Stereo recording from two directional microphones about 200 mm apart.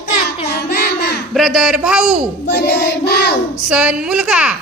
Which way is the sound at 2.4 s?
55° left (ahead or behind).